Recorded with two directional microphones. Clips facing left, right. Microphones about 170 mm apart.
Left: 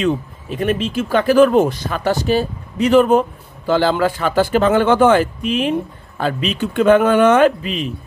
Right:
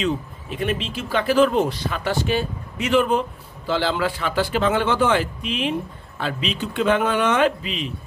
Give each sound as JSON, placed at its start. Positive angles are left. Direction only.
{"t": 0.0, "sound": "speech", "side_deg": 45}